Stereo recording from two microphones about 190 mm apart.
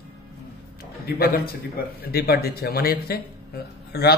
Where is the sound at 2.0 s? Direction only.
55° left (ahead or behind).